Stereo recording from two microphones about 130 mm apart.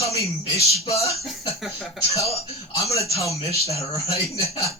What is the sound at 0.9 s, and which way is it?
Speech, 25° left (ahead or behind).